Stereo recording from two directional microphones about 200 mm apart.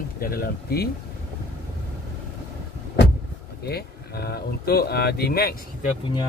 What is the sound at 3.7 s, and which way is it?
Speech, 50° left (ahead or behind).